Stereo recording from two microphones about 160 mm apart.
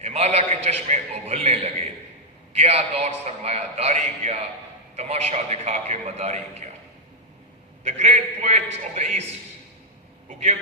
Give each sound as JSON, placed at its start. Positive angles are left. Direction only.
{"t": 0.0, "sound": "a man's voice", "side_deg": -40}
{"t": 7.9, "sound": "a man's voice", "side_deg": -45}
{"t": 10.2, "sound": "speech", "side_deg": -45}